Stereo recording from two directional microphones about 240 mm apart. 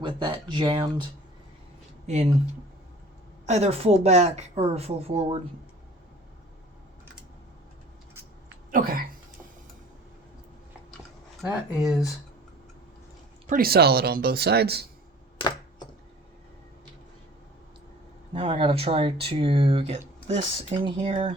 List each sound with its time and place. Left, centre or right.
0.0 s a woman's voice: centre
2.1 s a woman's voice: right
3.4 s a woman's voice: right
8.7 s speech: right
11.4 s speech: centre
13.5 s speech: right
15.4 s chopping: centre
18.3 s a woman's voice: right